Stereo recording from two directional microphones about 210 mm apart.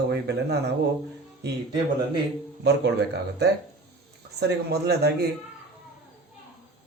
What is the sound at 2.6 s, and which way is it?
A man's voice, 55° right (ahead or behind).